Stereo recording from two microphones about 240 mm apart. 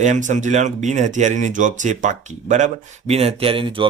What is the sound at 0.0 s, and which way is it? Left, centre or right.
Speech, right.